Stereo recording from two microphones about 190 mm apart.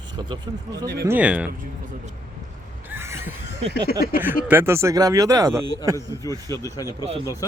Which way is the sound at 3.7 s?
50° left (ahead or behind).